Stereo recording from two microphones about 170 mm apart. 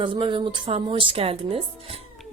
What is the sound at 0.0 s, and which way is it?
A woman's voice, 30° right (ahead or behind).